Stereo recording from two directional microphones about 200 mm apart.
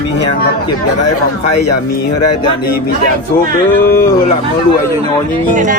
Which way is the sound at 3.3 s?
45° left (ahead or behind).